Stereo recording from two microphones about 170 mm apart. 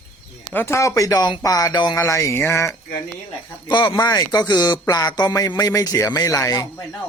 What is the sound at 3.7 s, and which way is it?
Speech, 25° left (ahead or behind).